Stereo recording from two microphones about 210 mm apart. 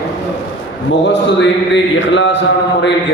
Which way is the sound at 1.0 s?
55° left (ahead or behind).